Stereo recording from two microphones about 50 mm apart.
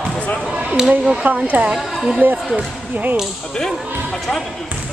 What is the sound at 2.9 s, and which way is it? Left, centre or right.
Speech, right.